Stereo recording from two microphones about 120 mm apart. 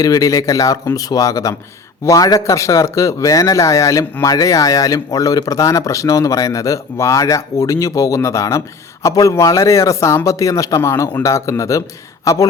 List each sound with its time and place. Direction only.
0.0 s speech: 30° left (ahead or behind)